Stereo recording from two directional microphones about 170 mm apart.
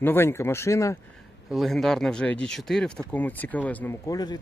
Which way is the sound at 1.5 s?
Centre (ahead or behind).